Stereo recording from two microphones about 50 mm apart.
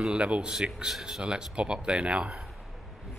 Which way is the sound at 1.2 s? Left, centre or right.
Centre.